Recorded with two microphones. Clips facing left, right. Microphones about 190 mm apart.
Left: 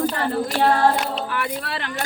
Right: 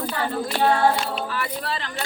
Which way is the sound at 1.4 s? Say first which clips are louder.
Left 1 dB; 60° left (ahead or behind).